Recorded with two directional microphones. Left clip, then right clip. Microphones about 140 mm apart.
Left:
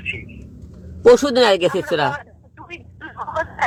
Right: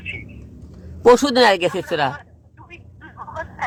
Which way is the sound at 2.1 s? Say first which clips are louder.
Left 6 dB; 60° left (ahead or behind).